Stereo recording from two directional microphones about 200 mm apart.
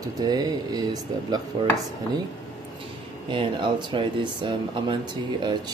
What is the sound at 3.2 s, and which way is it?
Speech, 25° right (ahead or behind).